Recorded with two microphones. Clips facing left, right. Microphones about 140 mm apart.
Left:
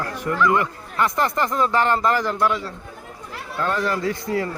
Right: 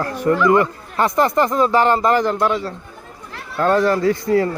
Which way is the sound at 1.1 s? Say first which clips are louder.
Right 6 dB; 20° right (ahead or behind).